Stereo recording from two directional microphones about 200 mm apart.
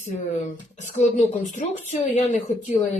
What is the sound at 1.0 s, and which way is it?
A woman's voice, 35° left (ahead or behind).